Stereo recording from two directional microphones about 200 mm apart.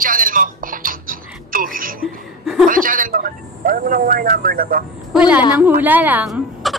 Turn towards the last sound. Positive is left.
turn(degrees=-5)  # may be behind; listen again after turning